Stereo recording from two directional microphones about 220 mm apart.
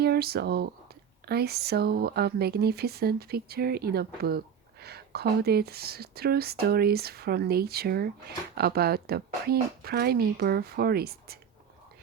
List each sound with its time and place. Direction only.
0.0 s speech: 45° right (ahead or behind)